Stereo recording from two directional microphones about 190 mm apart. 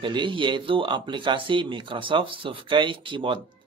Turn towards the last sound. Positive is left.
turn(degrees=-25)  # may be behind; listen again after turning